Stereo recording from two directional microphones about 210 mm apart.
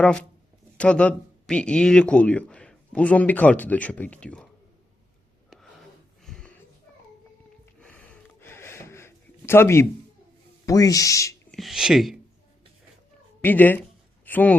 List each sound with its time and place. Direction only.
0.8 s speech: 5° left (ahead or behind)
6.2 s a sound: 5° left (ahead or behind)
7.6 s a sound: 5° left (ahead or behind)
10.7 s speech: 15° left (ahead or behind)
11.5 s speech: centre (ahead or behind)
13.4 s speech: 10° left (ahead or behind)